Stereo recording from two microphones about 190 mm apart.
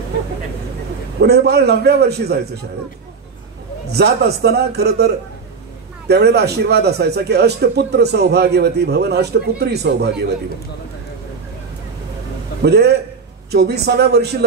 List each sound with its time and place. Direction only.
1.2 s a man's voice: 60° right (ahead or behind)
3.9 s a man's voice: 60° right (ahead or behind)
12.6 s a man's voice: 60° right (ahead or behind)